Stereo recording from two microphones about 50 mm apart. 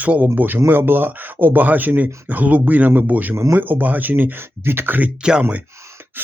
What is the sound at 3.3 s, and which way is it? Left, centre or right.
Speech, right.